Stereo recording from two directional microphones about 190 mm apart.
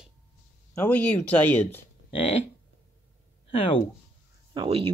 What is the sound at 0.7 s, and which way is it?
Speech, 10° left (ahead or behind).